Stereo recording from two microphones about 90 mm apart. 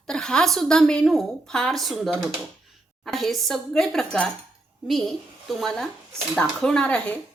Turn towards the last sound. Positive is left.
turn(degrees=15)  # may be behind; listen again after turning